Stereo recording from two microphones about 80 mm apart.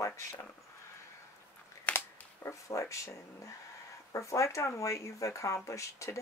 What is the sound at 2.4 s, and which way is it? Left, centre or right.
Speech, left.